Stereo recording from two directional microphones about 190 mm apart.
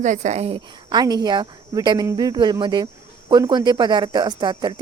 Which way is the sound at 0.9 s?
20° right (ahead or behind).